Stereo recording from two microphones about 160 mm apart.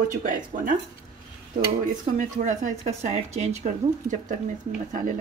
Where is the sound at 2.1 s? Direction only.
50° right (ahead or behind).